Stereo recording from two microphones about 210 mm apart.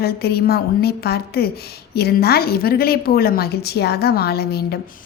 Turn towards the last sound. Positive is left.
turn(degrees=50)  # may be behind; listen again after turning